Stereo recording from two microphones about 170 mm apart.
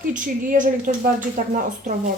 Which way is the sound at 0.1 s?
50° right (ahead or behind).